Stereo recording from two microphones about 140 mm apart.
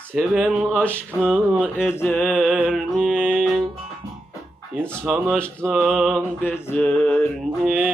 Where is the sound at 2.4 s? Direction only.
10° right (ahead or behind).